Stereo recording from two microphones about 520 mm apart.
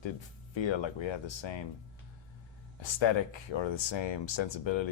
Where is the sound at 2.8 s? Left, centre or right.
Left.